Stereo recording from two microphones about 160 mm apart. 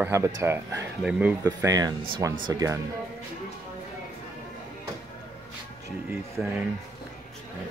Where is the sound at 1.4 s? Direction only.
20° right (ahead or behind).